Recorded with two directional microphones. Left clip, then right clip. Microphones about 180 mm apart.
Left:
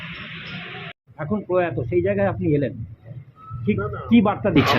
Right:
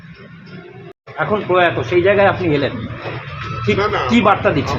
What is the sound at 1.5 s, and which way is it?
Speech, 30° left (ahead or behind).